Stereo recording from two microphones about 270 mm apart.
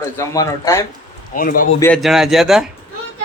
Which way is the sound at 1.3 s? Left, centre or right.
Left.